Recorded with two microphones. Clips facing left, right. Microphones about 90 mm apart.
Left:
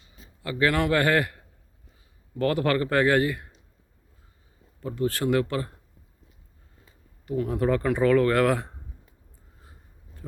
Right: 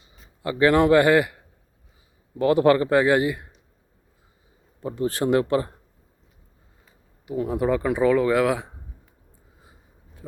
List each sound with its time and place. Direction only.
0.0 s a man's voice: 20° right (ahead or behind)
2.4 s speech: 20° right (ahead or behind)
4.8 s speech: 25° right (ahead or behind)
7.3 s speech: 15° right (ahead or behind)